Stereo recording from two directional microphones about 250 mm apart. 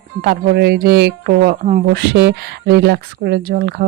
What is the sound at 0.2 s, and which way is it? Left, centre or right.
Speech, right.